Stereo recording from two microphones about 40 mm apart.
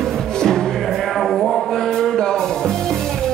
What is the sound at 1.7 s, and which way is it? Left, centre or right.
Music, centre.